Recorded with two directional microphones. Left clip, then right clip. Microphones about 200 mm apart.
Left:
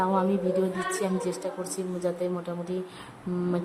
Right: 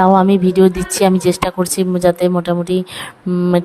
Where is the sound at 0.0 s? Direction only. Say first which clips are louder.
Right 14 dB; 40° right (ahead or behind).